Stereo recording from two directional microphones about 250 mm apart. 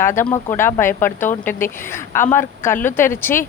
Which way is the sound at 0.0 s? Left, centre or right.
Centre.